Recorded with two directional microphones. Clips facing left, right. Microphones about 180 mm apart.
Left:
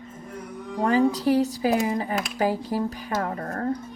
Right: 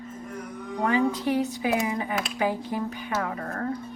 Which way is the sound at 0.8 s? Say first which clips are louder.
Left 3 dB; 35° left (ahead or behind).